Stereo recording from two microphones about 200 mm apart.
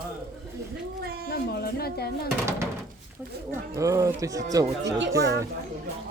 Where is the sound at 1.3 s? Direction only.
50° left (ahead or behind).